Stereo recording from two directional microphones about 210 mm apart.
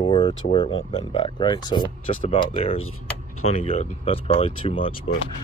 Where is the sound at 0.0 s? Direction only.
20° left (ahead or behind).